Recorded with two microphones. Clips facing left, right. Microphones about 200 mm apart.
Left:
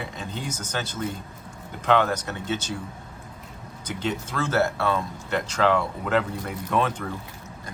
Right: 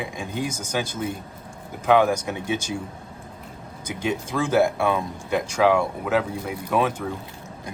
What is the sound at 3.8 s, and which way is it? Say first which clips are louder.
Speech: right 2 dB; 10° right (ahead or behind).